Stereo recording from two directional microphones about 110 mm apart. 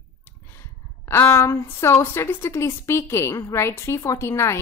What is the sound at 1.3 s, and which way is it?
A woman's voice, 30° left (ahead or behind).